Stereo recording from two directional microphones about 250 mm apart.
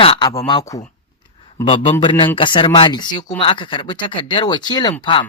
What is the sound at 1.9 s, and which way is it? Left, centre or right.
Speech, centre.